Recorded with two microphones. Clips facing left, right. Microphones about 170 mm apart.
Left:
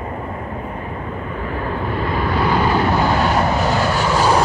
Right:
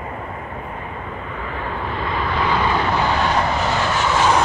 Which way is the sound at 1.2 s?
40° left (ahead or behind).